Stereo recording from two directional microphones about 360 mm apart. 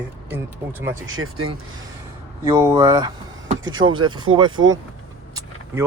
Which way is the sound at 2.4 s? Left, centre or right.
Centre.